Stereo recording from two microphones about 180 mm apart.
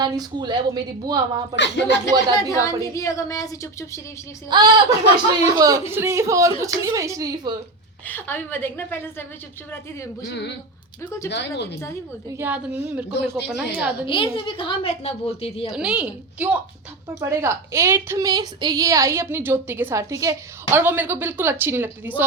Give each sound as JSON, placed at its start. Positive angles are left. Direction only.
{"t": 0.0, "sound": "a woman's voice", "side_deg": -25}
{"t": 1.5, "sound": "speech", "side_deg": 75}
{"t": 2.4, "sound": "a woman's voice", "side_deg": 20}
{"t": 4.4, "sound": "a woman's voice", "side_deg": -25}
{"t": 8.0, "sound": "a woman's voice", "side_deg": 10}
{"t": 10.2, "sound": "speech", "side_deg": 70}
{"t": 12.4, "sound": "a woman's voice", "side_deg": -10}
{"t": 14.1, "sound": "a woman's voice", "side_deg": 30}
{"t": 15.7, "sound": "a woman's voice", "side_deg": -5}